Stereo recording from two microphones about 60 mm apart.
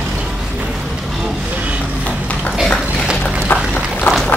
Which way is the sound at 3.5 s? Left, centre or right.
Left.